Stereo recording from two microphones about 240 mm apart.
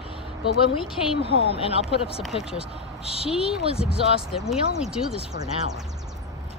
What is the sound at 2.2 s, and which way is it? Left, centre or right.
Speech, centre.